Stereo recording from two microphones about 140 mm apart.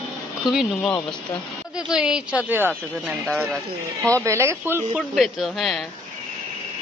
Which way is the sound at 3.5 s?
5° left (ahead or behind).